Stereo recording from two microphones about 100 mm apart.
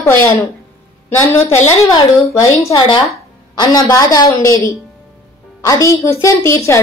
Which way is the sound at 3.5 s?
45° left (ahead or behind).